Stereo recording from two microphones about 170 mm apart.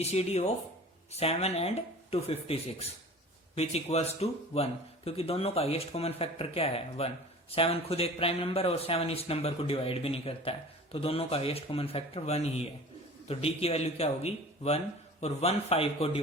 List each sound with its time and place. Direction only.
0.0 s a man's voice: 40° left (ahead or behind)